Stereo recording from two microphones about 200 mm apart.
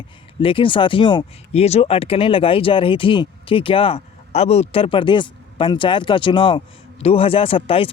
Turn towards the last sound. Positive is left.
turn(degrees=30)  # may be behind; listen again after turning